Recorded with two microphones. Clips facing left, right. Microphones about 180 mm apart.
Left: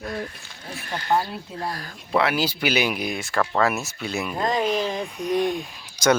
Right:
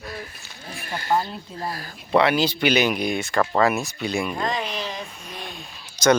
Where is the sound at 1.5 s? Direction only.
5° right (ahead or behind).